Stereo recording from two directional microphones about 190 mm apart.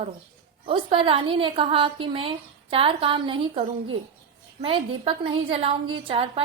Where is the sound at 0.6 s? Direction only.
30° right (ahead or behind).